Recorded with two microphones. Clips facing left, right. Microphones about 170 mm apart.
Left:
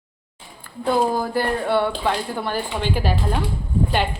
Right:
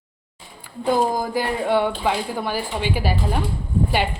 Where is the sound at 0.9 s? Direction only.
15° right (ahead or behind).